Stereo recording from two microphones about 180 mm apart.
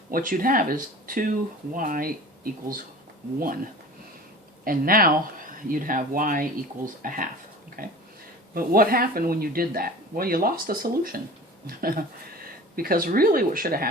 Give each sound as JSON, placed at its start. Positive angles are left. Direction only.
{"t": 0.1, "sound": "speech", "side_deg": -50}